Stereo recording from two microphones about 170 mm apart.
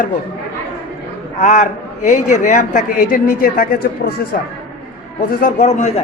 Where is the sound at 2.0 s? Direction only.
45° left (ahead or behind).